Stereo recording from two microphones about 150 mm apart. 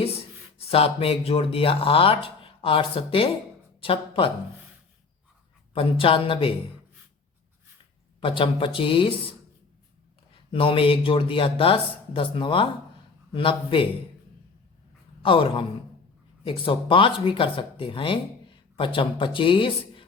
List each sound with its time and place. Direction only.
0.6 s speech: 40° left (ahead or behind)
5.7 s speech: 40° left (ahead or behind)
8.2 s speech: 35° left (ahead or behind)
10.5 s speech: 35° left (ahead or behind)
15.2 s speech: 35° left (ahead or behind)